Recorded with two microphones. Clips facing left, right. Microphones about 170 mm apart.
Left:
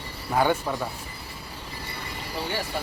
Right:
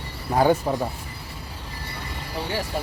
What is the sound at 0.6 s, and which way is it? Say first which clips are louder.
Speech: right 4 dB; 25° right (ahead or behind).